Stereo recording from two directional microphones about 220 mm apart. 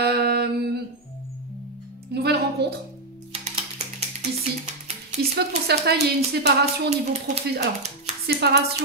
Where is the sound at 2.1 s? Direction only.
50° right (ahead or behind).